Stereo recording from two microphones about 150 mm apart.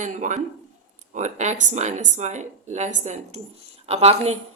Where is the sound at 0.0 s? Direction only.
55° right (ahead or behind).